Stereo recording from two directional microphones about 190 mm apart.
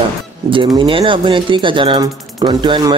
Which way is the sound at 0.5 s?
25° right (ahead or behind).